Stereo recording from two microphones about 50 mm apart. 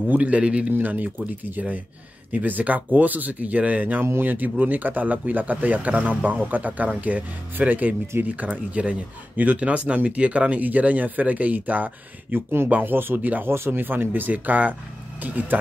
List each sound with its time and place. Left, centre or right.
0.1 s a man's voice: right
0.7 s speech: right
4.0 s speech: right
4.3 s speech: right
12.4 s speech: right
12.6 s speech: right
12.9 s speech: right